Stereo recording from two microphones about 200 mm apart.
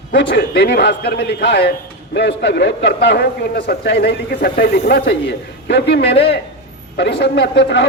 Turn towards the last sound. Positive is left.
turn(degrees=60)  # may be behind; listen again after turning